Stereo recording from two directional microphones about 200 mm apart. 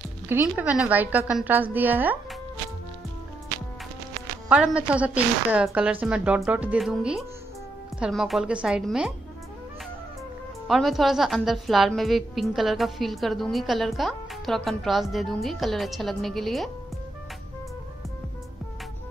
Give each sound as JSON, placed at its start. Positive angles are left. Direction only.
{"t": 0.3, "sound": "a woman's voice", "side_deg": -10}
{"t": 4.5, "sound": "a woman's voice", "side_deg": -5}
{"t": 10.7, "sound": "a woman's voice", "side_deg": 0}